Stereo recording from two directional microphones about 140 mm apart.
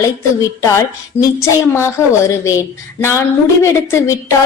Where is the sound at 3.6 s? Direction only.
20° left (ahead or behind).